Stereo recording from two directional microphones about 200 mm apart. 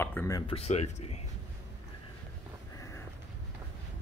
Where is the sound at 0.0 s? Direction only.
10° left (ahead or behind).